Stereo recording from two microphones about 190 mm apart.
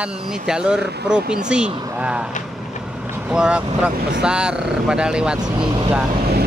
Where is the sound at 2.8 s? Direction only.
5° right (ahead or behind).